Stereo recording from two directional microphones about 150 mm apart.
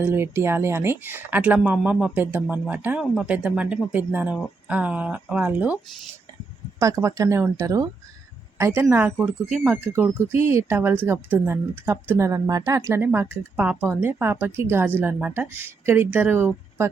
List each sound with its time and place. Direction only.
0.0 s speech: 15° right (ahead or behind)